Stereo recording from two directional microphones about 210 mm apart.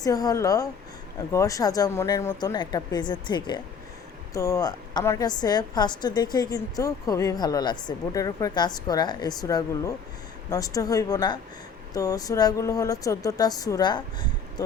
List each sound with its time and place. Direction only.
0.0 s a woman's voice: 15° left (ahead or behind)